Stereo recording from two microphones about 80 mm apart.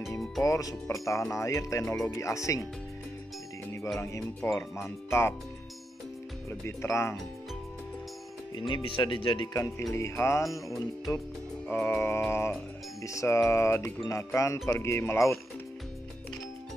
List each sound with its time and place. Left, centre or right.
0.4 s speech: left
4.6 s speech: left
6.6 s speech: left
8.5 s speech: left
9.9 s speech: left
11.6 s music: centre
11.9 s mantra: left
12.3 s speech: left